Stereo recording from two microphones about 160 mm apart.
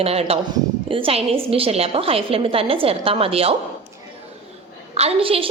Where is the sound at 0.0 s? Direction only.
40° right (ahead or behind).